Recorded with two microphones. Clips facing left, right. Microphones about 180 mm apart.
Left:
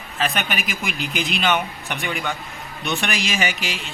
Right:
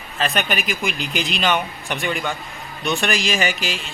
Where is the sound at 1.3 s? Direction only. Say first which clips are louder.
Even; 15° left (ahead or behind).